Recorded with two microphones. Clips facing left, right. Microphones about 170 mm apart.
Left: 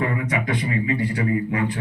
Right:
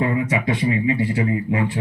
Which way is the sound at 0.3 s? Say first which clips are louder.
Right 4 dB; 25° right (ahead or behind).